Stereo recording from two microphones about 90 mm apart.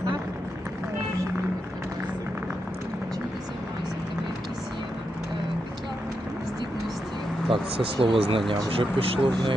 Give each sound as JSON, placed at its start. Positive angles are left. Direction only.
{"t": 7.4, "sound": "speech", "side_deg": -75}